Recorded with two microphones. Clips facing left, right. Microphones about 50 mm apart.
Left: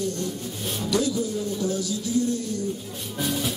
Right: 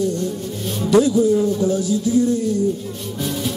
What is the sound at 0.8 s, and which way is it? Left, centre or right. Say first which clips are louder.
Speech: right 11 dB; right.